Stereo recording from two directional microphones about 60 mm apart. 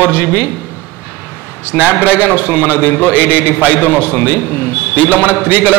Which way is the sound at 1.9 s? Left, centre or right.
Left.